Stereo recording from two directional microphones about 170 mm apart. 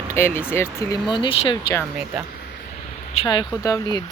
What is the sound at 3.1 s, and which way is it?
Speech, 30° left (ahead or behind).